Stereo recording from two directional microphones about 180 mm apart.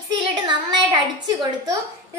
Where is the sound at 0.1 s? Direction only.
25° right (ahead or behind).